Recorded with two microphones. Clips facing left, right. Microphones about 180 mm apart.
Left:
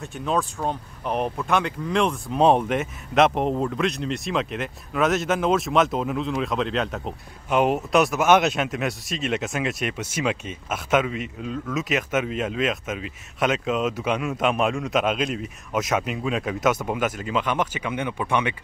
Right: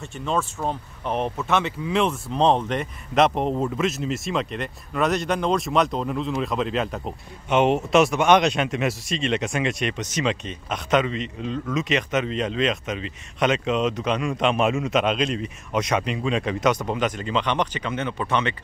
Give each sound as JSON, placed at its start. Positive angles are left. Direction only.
{"t": 0.0, "sound": "speech", "side_deg": 0}
{"t": 2.3, "sound": "speech", "side_deg": 10}